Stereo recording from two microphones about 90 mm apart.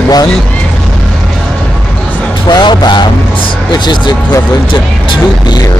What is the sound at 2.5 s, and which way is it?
Speech, 50° left (ahead or behind).